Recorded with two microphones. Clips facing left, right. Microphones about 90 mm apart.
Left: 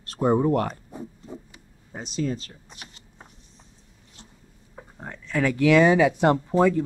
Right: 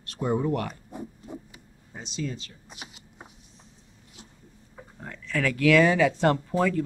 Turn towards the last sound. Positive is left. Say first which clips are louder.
# left 5 dB
turn(degrees=20)  # may be behind; listen again after turning